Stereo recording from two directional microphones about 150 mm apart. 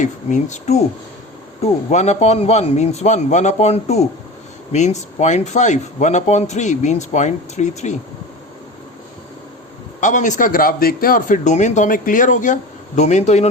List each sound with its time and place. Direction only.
0.0 s speech: 55° left (ahead or behind)
10.0 s a man's voice: 55° left (ahead or behind)